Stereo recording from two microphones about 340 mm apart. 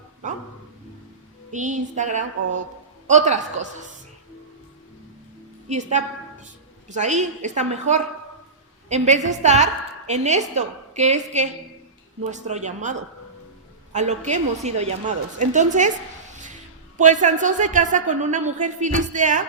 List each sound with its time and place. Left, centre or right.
0.2 s music: right
1.5 s a woman's voice: right
5.6 s a woman's voice: right
16.3 s music: right
17.0 s a woman's voice: right